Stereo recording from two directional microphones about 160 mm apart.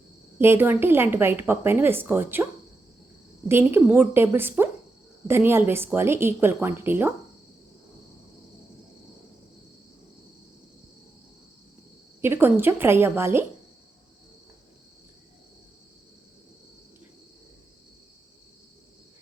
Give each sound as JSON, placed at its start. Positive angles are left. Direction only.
{"t": 0.3, "sound": "a woman's voice", "side_deg": -15}
{"t": 3.5, "sound": "a woman's voice", "side_deg": -15}
{"t": 12.2, "sound": "a woman's voice", "side_deg": -15}